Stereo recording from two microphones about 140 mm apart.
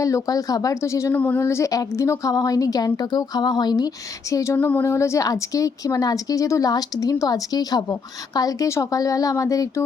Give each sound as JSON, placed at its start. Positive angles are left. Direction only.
{"t": 0.0, "sound": "a woman's voice", "side_deg": 25}